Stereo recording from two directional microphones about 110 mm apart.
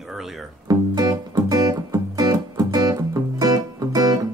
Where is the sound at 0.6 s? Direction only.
35° right (ahead or behind).